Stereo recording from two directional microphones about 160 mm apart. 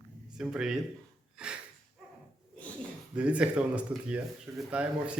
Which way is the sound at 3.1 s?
5° right (ahead or behind).